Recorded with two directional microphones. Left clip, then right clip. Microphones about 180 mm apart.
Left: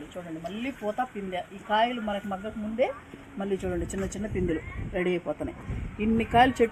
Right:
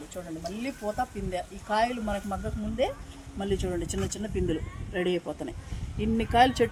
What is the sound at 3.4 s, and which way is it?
Speech, 10° left (ahead or behind).